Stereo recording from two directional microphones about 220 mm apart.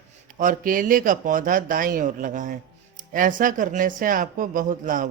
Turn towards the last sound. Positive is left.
turn(degrees=-35)  # may be behind; listen again after turning